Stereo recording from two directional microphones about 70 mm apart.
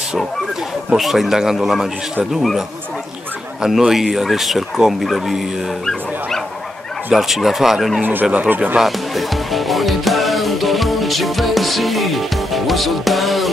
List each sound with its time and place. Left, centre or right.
0.9 s speech: centre
3.6 s speech: centre
7.2 s speech: centre
8.0 s speech: right
8.7 s music: centre